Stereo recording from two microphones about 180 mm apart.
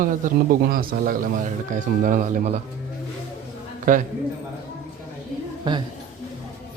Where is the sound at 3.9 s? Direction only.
50° right (ahead or behind).